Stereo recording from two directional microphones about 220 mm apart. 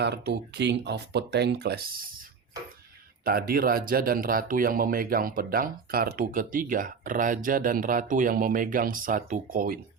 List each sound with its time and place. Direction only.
0.0 s speech: 50° right (ahead or behind)
3.2 s speech: 40° right (ahead or behind)